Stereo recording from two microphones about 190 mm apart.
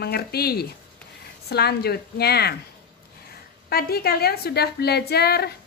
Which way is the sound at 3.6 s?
55° left (ahead or behind).